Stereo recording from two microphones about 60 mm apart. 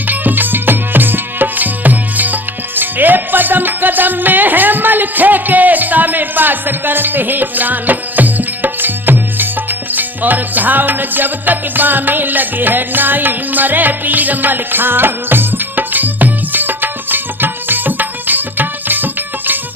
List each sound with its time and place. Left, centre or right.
0.1 s music: right